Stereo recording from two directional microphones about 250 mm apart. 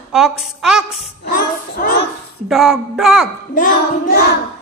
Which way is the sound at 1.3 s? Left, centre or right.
Left.